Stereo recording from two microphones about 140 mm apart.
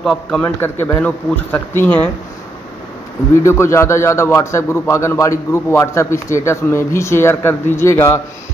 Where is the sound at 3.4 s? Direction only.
20° left (ahead or behind).